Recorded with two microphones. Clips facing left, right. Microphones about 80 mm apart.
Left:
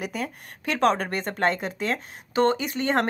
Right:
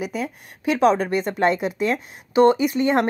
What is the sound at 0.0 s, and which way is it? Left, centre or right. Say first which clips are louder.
Speech: right 4 dB; centre.